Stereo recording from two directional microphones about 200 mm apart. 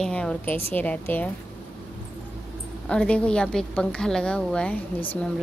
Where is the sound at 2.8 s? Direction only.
5° left (ahead or behind).